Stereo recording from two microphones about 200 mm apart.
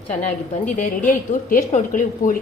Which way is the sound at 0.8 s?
40° left (ahead or behind).